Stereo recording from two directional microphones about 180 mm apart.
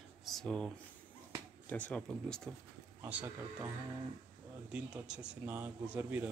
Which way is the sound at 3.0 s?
10° right (ahead or behind).